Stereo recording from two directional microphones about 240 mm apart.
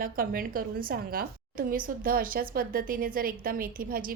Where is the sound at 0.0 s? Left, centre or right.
Right.